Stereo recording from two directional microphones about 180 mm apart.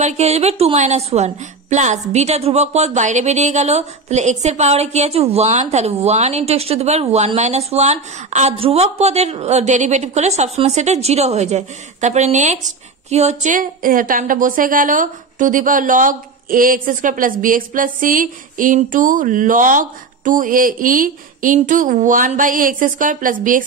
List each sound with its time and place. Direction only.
0.0 s a woman's voice: 35° right (ahead or behind)